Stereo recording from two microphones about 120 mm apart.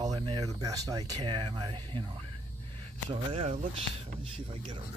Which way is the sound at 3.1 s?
65° right (ahead or behind).